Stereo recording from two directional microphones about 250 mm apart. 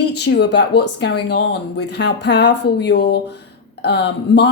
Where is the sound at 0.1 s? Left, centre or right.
Left.